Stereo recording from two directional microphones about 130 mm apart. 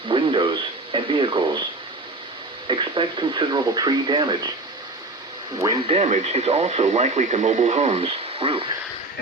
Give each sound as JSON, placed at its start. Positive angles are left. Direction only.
{"t": 0.1, "sound": "radio", "side_deg": -40}
{"t": 0.9, "sound": "speech", "side_deg": -40}
{"t": 2.6, "sound": "speech", "side_deg": -35}
{"t": 5.5, "sound": "speech", "side_deg": -30}
{"t": 5.9, "sound": "speech", "side_deg": -60}